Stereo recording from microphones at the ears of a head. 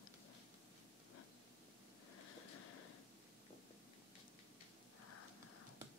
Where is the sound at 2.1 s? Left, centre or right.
Left.